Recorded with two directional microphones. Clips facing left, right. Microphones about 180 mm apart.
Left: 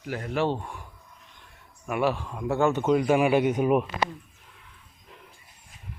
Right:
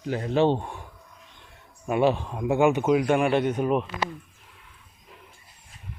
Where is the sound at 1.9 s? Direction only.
25° right (ahead or behind); by 3.8 s 10° left (ahead or behind).